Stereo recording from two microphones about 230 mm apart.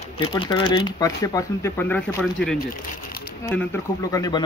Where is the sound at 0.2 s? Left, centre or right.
Centre.